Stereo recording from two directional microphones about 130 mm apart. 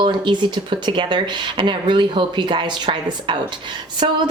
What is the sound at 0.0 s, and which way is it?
A woman's voice, 35° right (ahead or behind).